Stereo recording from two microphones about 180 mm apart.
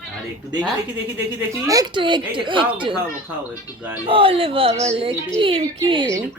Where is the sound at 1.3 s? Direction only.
15° right (ahead or behind).